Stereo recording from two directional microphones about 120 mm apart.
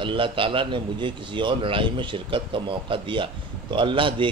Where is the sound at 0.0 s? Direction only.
45° right (ahead or behind).